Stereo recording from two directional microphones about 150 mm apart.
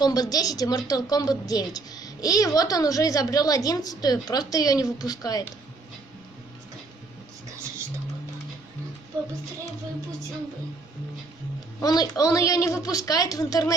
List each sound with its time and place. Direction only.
0.0 s a woman's voice: 25° left (ahead or behind)
11.8 s a woman's voice: 25° left (ahead or behind)